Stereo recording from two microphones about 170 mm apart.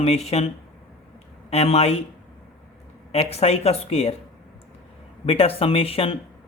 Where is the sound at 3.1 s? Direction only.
35° left (ahead or behind).